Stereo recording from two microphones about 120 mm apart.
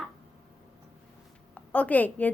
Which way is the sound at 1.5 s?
10° left (ahead or behind).